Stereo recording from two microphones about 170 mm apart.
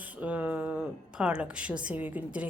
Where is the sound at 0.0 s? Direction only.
10° right (ahead or behind).